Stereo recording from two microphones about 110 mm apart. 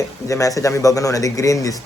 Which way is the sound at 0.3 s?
30° left (ahead or behind).